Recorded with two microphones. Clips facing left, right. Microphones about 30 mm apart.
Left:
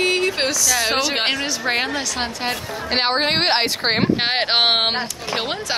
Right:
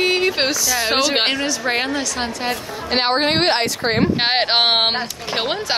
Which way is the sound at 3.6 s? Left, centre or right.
Left.